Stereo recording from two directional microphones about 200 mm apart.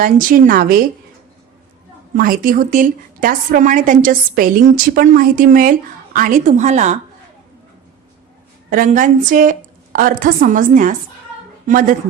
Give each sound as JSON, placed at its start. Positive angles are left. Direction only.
{"t": 0.0, "sound": "a woman's voice", "side_deg": -45}
{"t": 2.1, "sound": "a woman's voice", "side_deg": -45}
{"t": 8.7, "sound": "a woman's voice", "side_deg": -40}